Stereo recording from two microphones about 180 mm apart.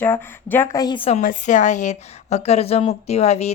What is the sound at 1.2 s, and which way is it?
Speech, 45° left (ahead or behind).